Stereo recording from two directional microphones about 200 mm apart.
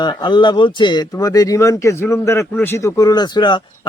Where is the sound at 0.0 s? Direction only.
20° left (ahead or behind).